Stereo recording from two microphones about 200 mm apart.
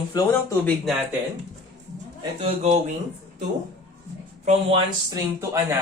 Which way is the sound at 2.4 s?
35° right (ahead or behind).